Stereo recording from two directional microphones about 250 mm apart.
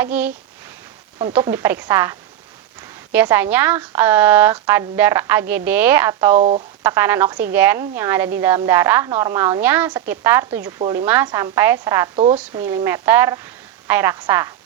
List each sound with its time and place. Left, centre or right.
0.0 s a woman's voice: centre
6.3 s speech: right
6.8 s a woman's voice: centre
12.1 s speech: right
12.4 s a woman's voice: centre